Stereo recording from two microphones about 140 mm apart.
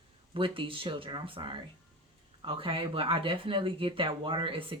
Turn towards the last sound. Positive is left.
turn(degrees=-40)  # may be behind; listen again after turning